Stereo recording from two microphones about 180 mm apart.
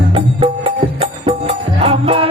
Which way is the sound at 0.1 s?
30° right (ahead or behind).